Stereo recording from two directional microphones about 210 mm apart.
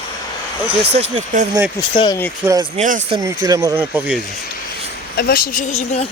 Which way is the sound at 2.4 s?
15° right (ahead or behind).